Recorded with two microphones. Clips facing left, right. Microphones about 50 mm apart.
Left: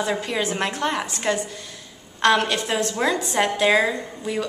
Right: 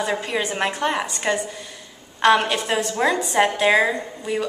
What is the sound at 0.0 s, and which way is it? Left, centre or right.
A woman's voice, centre.